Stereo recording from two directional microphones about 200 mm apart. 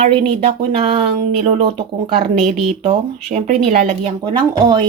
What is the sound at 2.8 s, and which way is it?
Speech, 35° right (ahead or behind).